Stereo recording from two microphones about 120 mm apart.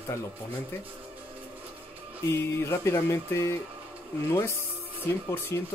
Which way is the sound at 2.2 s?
20° left (ahead or behind).